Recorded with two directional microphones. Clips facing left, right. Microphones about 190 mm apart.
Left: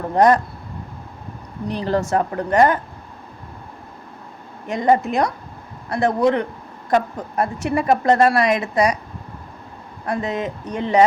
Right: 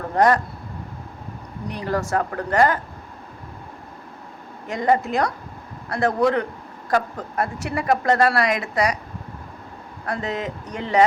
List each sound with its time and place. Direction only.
1.7 s a woman's voice: 30° left (ahead or behind)
4.6 s a woman's voice: 20° left (ahead or behind)
10.1 s a woman's voice: 20° left (ahead or behind)